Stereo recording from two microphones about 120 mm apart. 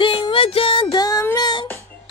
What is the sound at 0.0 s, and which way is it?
Music, 45° left (ahead or behind).